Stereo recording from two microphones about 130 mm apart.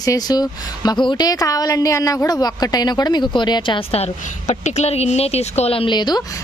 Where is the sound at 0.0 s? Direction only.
30° left (ahead or behind).